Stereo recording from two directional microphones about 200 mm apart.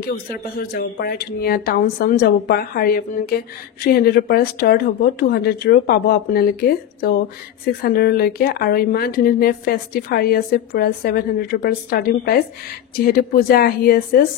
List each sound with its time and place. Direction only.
0.6 s speech: 50° left (ahead or behind)